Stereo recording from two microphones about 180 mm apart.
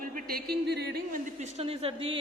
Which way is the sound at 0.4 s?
65° right (ahead or behind).